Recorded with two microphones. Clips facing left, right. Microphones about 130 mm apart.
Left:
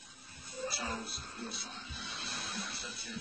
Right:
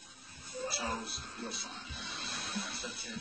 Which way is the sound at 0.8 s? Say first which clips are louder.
Right 2 dB; centre (ahead or behind).